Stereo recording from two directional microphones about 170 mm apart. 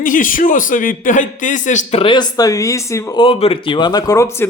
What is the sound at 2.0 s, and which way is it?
A man's voice, 25° left (ahead or behind).